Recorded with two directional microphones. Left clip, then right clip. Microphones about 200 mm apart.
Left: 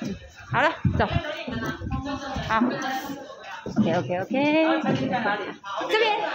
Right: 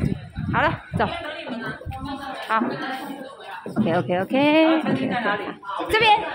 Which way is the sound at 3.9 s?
10° right (ahead or behind).